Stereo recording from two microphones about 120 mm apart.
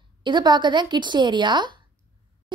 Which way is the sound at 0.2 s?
40° right (ahead or behind).